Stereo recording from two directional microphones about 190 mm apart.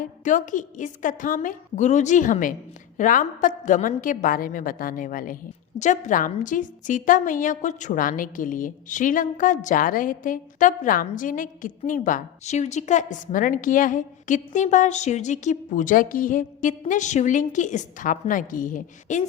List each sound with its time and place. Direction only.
0.0 s a woman's voice: 40° left (ahead or behind)